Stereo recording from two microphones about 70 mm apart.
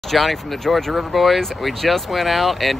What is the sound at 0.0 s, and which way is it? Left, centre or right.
Speech, centre.